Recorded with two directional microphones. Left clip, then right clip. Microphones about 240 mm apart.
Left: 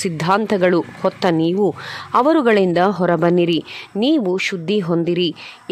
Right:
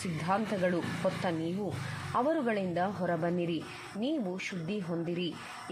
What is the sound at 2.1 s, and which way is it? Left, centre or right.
A woman's voice, left.